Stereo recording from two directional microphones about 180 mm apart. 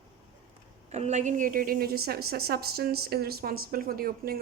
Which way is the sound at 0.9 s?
40° right (ahead or behind).